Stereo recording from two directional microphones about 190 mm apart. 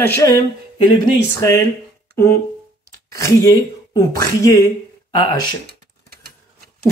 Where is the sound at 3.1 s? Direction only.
15° left (ahead or behind).